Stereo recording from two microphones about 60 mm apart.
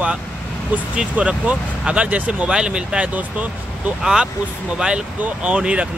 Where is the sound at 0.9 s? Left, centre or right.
Right.